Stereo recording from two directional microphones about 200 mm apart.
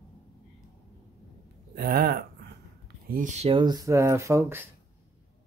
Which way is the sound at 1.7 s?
50° right (ahead or behind).